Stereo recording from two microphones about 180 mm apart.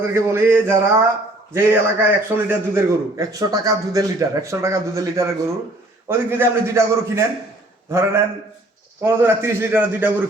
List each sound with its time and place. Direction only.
0.0 s a man's voice: 15° right (ahead or behind)
9.0 s a man's voice: 10° right (ahead or behind)